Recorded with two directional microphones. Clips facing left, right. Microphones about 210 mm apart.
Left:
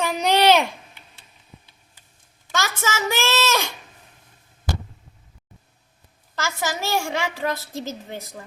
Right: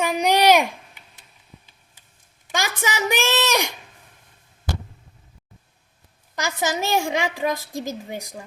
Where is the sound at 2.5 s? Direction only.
15° right (ahead or behind).